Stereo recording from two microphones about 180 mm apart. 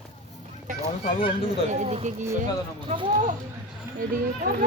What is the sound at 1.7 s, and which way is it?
Speech, 40° right (ahead or behind).